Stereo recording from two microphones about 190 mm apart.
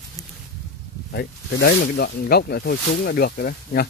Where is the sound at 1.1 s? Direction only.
55° left (ahead or behind).